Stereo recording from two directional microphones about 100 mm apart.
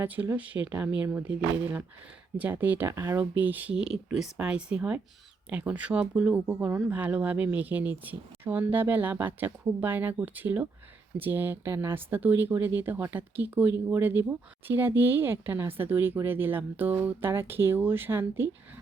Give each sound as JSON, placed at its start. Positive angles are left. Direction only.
{"t": 0.0, "sound": "speech", "side_deg": -20}